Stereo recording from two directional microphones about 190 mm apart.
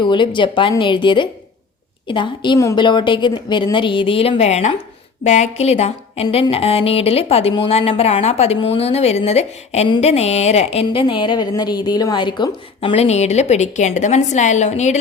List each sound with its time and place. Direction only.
0.0 s a woman's voice: 25° left (ahead or behind)